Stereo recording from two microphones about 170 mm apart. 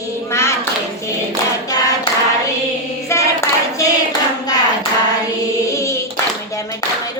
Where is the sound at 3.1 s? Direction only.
15° left (ahead or behind).